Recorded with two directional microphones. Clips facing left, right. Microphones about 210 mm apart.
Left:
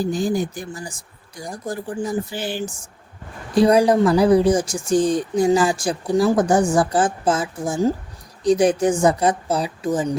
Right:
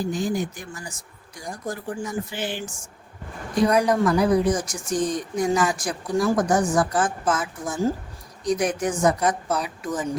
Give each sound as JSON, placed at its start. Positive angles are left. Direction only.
{"t": 0.0, "sound": "a woman's voice", "side_deg": 35}